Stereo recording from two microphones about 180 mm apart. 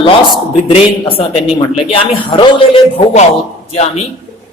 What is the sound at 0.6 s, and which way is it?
Speech, 30° left (ahead or behind).